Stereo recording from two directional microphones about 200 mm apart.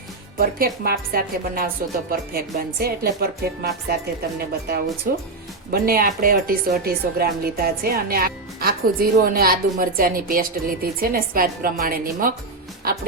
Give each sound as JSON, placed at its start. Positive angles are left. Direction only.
{"t": 0.3, "sound": "a woman's voice", "side_deg": -50}
{"t": 5.1, "sound": "a woman's voice", "side_deg": -45}